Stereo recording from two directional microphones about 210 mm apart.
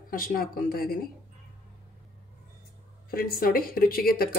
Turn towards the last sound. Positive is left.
turn(degrees=45)  # may be behind; listen again after turning